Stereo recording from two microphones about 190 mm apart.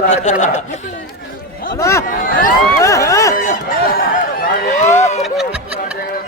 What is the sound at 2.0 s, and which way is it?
Speech, 45° left (ahead or behind).